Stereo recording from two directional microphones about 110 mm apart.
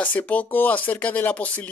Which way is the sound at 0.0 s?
15° left (ahead or behind).